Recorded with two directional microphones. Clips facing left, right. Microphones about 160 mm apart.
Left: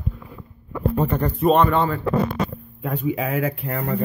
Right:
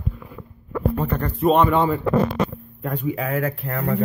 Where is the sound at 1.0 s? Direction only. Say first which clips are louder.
Left 3 dB; 15° left (ahead or behind).